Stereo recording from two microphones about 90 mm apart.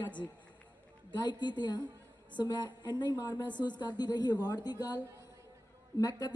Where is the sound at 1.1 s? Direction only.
55° left (ahead or behind).